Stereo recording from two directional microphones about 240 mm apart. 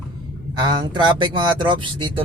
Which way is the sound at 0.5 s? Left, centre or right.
Centre.